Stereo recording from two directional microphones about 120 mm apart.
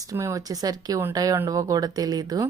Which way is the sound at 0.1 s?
25° right (ahead or behind).